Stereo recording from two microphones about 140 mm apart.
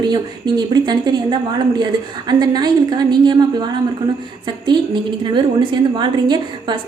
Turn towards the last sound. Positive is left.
turn(degrees=-30)  # may be behind; listen again after turning